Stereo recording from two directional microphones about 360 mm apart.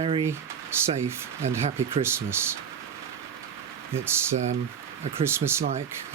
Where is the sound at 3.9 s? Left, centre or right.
Centre.